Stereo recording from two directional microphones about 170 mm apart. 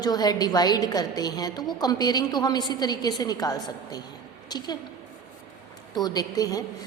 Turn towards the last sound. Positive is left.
turn(degrees=20)  # may be behind; listen again after turning